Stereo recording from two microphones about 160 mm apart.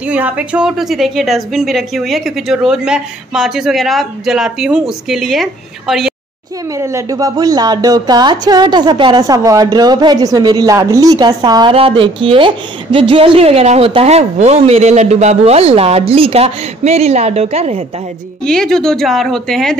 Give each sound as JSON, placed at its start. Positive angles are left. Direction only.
{"t": 0.0, "sound": "a woman's voice", "side_deg": -10}
{"t": 6.8, "sound": "speech", "side_deg": -20}
{"t": 18.4, "sound": "a woman's voice", "side_deg": 5}